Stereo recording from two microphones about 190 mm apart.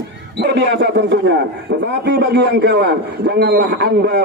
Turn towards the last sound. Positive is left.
turn(degrees=-65)  # may be behind; listen again after turning